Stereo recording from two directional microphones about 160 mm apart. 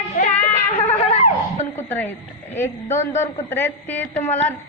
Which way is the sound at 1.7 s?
10° left (ahead or behind).